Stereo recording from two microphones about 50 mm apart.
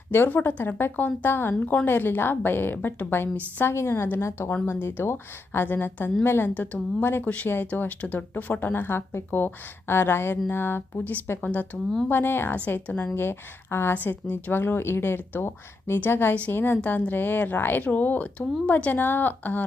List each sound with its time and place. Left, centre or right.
0.1 s speech: left
0.3 s a woman's voice: left
0.9 s a woman's voice: left
1.3 s a woman's voice: left
3.8 s a woman's voice: left
6.5 s a woman's voice: left
7.9 s a woman's voice: left
8.6 s a woman's voice: left
11.4 s a woman's voice: left
12.0 s a woman's voice: left
12.5 s a woman's voice: left
13.1 s a woman's voice: left
13.9 s a woman's voice: left